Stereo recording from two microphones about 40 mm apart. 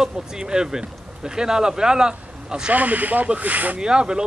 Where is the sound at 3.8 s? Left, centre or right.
Right.